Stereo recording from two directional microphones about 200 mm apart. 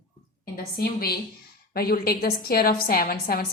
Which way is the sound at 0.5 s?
50° left (ahead or behind).